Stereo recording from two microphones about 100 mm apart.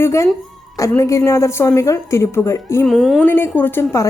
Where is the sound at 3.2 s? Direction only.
20° left (ahead or behind).